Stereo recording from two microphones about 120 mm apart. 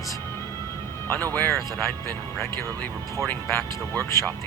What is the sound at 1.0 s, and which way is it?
Speech, 15° left (ahead or behind).